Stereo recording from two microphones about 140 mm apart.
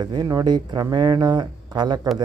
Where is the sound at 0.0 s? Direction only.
30° right (ahead or behind).